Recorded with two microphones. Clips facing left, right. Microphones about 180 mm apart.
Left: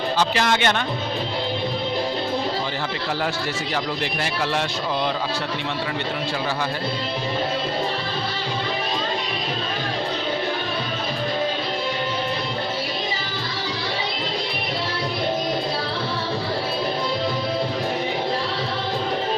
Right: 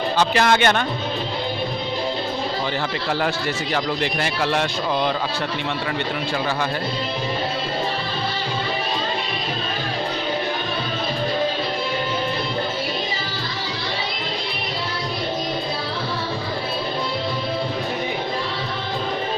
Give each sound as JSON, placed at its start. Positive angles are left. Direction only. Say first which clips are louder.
{"t": 0.2, "sound": "speech", "louder": "right 4 dB", "side_deg": -55}
{"t": 4.0, "sound": "speech", "louder": "right 2 dB", "side_deg": -60}